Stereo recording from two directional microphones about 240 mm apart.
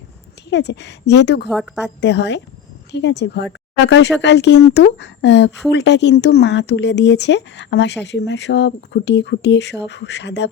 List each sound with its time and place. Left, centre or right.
0.5 s speech: left
1.5 s a woman's voice: centre
2.0 s speech: left